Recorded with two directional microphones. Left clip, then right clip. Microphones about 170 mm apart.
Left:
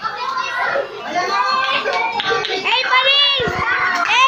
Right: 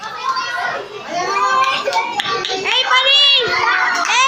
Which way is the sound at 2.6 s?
15° right (ahead or behind).